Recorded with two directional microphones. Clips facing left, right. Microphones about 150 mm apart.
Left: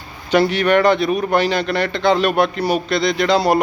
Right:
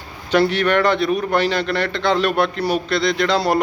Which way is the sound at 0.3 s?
10° left (ahead or behind).